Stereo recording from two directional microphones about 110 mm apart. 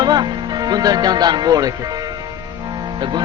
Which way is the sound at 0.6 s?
35° right (ahead or behind).